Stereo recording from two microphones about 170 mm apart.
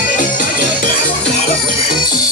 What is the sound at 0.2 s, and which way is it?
Music, 50° left (ahead or behind).